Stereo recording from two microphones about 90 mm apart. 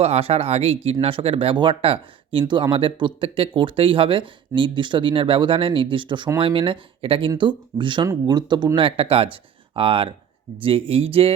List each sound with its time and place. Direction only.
0.2 s speech: 90° right
2.5 s speech: 65° right (ahead or behind)
6.4 s speech: 75° right (ahead or behind)
8.3 s speech: 50° right (ahead or behind); by 11.3 s 90° right